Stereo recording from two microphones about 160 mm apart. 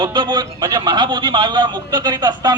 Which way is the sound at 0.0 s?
30° right (ahead or behind).